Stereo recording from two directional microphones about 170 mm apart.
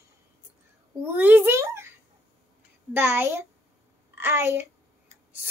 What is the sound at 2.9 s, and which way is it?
Speech, 10° right (ahead or behind).